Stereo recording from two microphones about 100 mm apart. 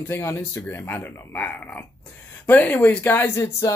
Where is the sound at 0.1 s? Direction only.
25° left (ahead or behind).